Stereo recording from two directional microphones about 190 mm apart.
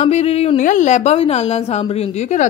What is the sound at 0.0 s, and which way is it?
A woman's voice, 35° left (ahead or behind).